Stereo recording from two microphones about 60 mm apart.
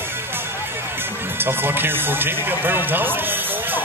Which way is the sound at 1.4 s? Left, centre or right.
Right.